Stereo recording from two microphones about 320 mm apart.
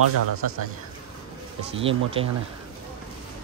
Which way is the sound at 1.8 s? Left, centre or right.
Centre.